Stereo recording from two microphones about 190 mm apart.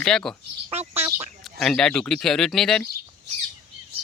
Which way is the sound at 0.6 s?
30° right (ahead or behind).